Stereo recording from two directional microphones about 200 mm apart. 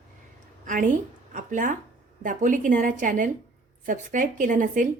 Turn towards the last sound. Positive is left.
turn(degrees=-40)  # may be behind; listen again after turning